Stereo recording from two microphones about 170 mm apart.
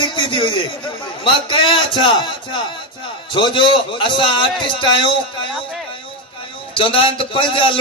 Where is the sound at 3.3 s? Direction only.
30° left (ahead or behind).